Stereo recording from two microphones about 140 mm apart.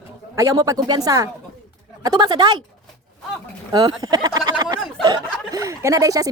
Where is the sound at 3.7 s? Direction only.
30° right (ahead or behind).